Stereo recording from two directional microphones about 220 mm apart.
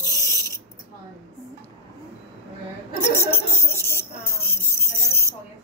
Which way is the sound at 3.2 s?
10° left (ahead or behind).